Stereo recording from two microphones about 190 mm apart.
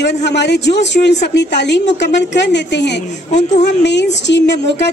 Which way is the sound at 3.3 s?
35° left (ahead or behind).